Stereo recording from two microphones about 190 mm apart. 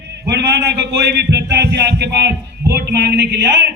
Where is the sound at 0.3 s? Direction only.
65° right (ahead or behind).